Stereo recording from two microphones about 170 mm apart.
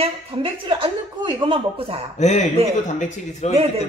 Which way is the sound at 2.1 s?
45° left (ahead or behind).